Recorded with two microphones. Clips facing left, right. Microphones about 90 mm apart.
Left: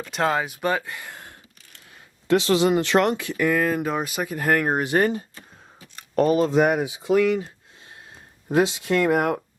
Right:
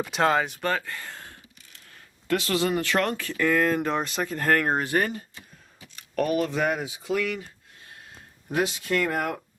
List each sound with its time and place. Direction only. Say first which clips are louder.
0.1 s speech: left 1 dB; centre (ahead or behind)
0.7 s speech: left 3 dB; 15° left (ahead or behind)
8.4 s speech: left 5 dB; 25° left (ahead or behind)